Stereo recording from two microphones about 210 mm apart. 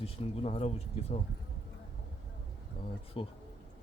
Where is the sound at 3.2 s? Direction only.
25° left (ahead or behind).